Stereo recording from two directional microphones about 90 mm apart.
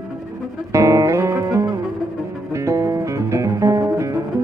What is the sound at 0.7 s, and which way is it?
Music, 35° right (ahead or behind).